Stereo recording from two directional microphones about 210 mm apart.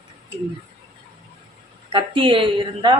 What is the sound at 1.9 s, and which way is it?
Speech, 25° right (ahead or behind).